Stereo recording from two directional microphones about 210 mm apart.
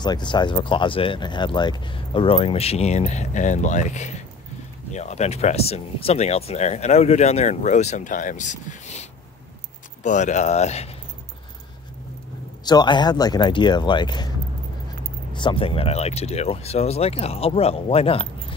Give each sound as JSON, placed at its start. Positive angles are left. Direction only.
{"t": 0.0, "sound": "speech", "side_deg": 20}
{"t": 12.6, "sound": "speech", "side_deg": 20}
{"t": 15.3, "sound": "speech", "side_deg": 25}